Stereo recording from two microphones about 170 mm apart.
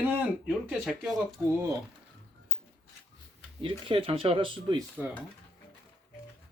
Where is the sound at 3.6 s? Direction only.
30° right (ahead or behind).